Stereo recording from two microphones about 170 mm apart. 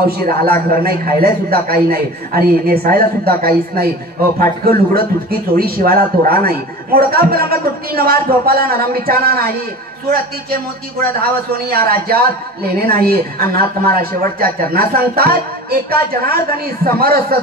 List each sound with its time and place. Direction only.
0.0 s speech: 60° right (ahead or behind)